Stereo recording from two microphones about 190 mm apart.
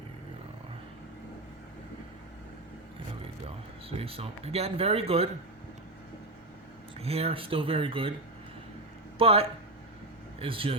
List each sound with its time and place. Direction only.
3.4 s speech: 30° right (ahead or behind)
7.0 s speech: 30° right (ahead or behind)
9.1 s speech: 30° right (ahead or behind)